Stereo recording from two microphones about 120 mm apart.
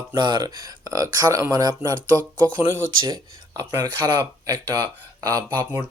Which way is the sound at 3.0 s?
35° right (ahead or behind).